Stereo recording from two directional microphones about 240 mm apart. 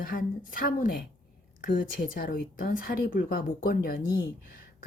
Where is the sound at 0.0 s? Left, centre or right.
Left.